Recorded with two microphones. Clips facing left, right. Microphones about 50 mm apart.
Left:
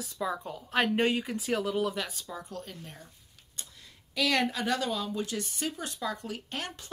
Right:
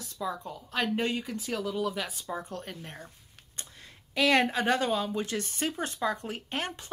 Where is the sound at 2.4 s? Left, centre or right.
Right.